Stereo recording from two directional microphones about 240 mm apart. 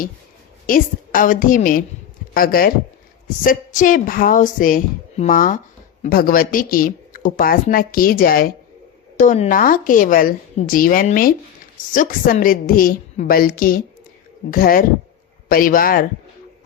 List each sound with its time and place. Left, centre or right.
0.7 s speech: left